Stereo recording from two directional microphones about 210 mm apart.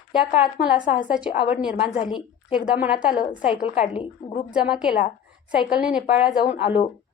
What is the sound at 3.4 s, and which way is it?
Speech, 30° left (ahead or behind).